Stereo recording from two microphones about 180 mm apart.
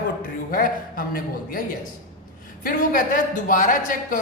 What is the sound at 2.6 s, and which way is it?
A woman's voice, 50° left (ahead or behind).